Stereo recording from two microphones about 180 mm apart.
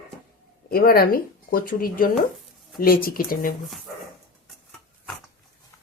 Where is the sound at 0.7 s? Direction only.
55° left (ahead or behind).